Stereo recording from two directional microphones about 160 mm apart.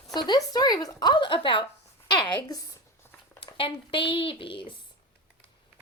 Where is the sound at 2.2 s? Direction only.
25° left (ahead or behind).